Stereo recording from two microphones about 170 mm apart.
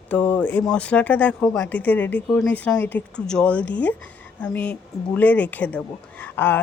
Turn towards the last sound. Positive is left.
turn(degrees=15)  # may be behind; listen again after turning